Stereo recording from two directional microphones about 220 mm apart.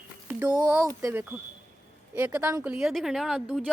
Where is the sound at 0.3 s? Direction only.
5° right (ahead or behind).